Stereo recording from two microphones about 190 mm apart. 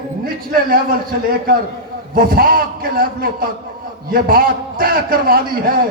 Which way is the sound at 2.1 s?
50° right (ahead or behind).